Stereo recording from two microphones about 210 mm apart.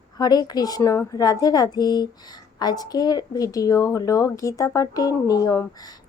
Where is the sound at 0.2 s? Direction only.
20° left (ahead or behind).